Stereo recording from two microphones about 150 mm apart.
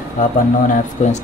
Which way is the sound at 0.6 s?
55° left (ahead or behind).